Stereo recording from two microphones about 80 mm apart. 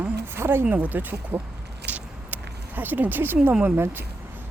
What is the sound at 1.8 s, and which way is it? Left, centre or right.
Vehicle, right.